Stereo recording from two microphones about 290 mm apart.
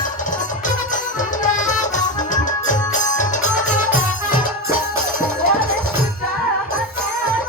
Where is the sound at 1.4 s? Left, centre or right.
Left.